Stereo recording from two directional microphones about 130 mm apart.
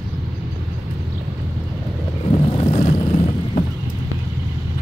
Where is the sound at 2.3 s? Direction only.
50° left (ahead or behind).